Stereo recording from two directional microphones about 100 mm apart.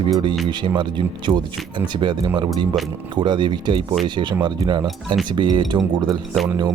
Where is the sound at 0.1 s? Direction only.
50° right (ahead or behind).